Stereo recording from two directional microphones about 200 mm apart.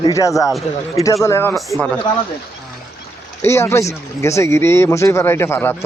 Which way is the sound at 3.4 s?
15° left (ahead or behind).